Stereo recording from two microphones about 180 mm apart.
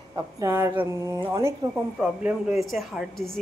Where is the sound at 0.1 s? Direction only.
15° right (ahead or behind).